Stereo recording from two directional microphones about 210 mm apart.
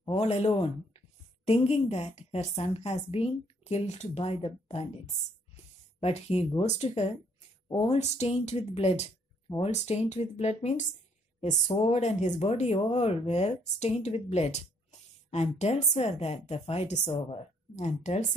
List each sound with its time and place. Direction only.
0.0 s a woman's voice: 30° left (ahead or behind)